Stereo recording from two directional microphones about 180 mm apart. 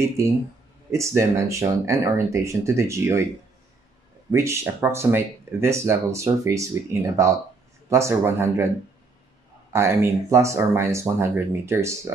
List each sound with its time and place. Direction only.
0.2 s speech: 15° right (ahead or behind)
4.3 s speech: 15° right (ahead or behind)
9.7 s speech: 15° right (ahead or behind)